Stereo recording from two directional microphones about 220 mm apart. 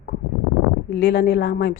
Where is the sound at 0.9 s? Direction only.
45° left (ahead or behind).